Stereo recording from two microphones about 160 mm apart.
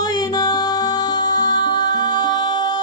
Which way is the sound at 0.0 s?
25° left (ahead or behind).